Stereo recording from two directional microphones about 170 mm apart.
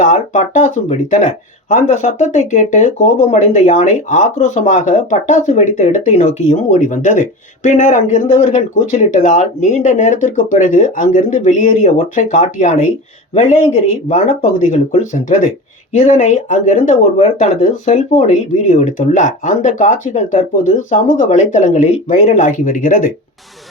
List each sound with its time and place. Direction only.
0.0 s speech: 50° left (ahead or behind)
22.3 s speech: 50° left (ahead or behind)